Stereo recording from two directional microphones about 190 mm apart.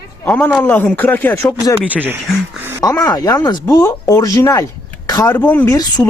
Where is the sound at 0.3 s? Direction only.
10° left (ahead or behind).